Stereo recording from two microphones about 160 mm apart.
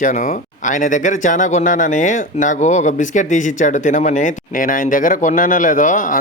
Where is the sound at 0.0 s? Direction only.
50° left (ahead or behind).